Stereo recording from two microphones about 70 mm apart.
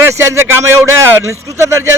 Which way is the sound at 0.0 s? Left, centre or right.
Right.